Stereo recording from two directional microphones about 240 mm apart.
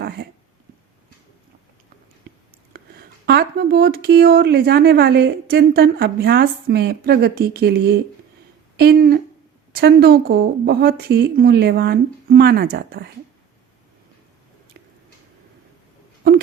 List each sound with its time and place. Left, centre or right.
2.7 s speech: right